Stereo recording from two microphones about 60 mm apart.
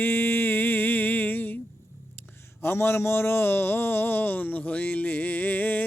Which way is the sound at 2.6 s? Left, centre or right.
Left.